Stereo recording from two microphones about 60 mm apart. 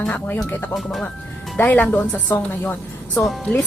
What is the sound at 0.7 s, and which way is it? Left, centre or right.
Speech, centre.